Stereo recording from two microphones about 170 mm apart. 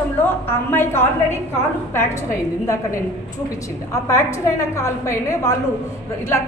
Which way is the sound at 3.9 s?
15° left (ahead or behind).